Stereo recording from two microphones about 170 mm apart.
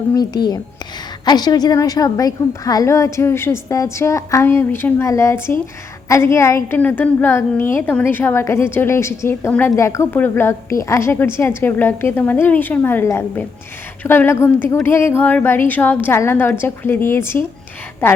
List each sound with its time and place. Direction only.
0.1 s a woman's voice: 25° left (ahead or behind)